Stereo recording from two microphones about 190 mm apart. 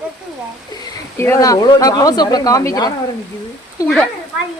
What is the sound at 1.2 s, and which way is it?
A woman's voice, 15° left (ahead or behind).